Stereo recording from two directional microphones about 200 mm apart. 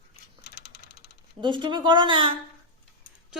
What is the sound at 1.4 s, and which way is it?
Speech, 25° right (ahead or behind).